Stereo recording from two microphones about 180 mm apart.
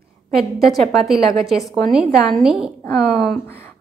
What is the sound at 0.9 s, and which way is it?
A woman's voice, centre (ahead or behind).